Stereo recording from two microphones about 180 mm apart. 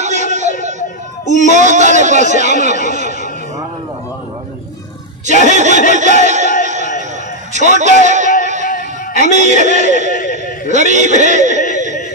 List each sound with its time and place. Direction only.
0.0 s a sound: 40° right (ahead or behind)
0.7 s speech: 40° right (ahead or behind)
5.2 s speech: 40° right (ahead or behind)
5.9 s a sound: 40° right (ahead or behind)
6.6 s music: 40° right (ahead or behind)
7.5 s a man's voice: 40° right (ahead or behind)
8.0 s music: 40° right (ahead or behind)
8.6 s music: 50° left (ahead or behind)
9.2 s a man's voice: 40° right (ahead or behind)
10.1 s a sound: 50° left (ahead or behind)
10.7 s a man's voice: 40° right (ahead or behind)
11.7 s a sound: 40° right (ahead or behind)